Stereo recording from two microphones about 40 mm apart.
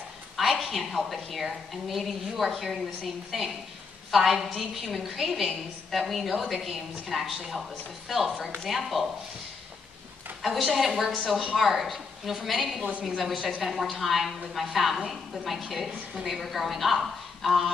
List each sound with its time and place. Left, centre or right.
0.4 s a woman's voice: centre
10.4 s a woman's voice: centre